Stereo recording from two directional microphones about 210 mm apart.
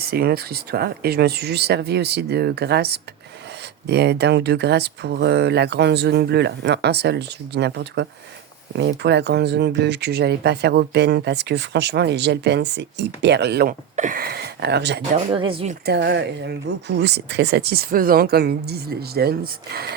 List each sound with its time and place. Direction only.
0.0 s speech: 50° right (ahead or behind)
13.9 s speech: 40° right (ahead or behind)
15.3 s speech: 25° right (ahead or behind)
15.9 s speech: 55° right (ahead or behind)